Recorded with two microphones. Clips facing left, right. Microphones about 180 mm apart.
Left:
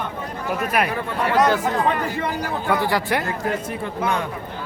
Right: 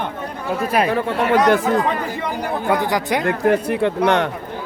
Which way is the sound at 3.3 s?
65° right (ahead or behind).